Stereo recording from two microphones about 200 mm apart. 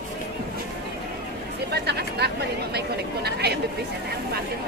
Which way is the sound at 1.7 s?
55° right (ahead or behind).